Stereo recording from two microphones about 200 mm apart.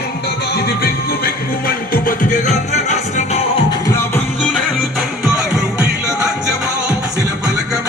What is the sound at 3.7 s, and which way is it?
Music, 15° left (ahead or behind).